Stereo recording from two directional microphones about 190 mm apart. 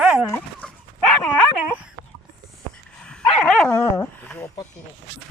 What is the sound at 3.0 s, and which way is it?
Dog, 5° left (ahead or behind).